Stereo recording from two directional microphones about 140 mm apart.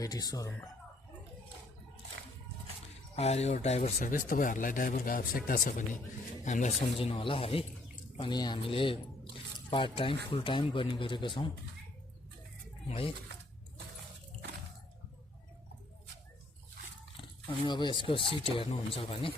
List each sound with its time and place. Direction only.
0.0 s speech: 25° left (ahead or behind)
3.2 s speech: 50° left (ahead or behind); by 6.0 s 75° left (ahead or behind)
6.4 s speech: 60° left (ahead or behind)
6.9 s speech: 40° left (ahead or behind)
8.2 s speech: 30° left (ahead or behind)
12.9 s speech: 40° left (ahead or behind)
17.2 s speech: 40° left (ahead or behind)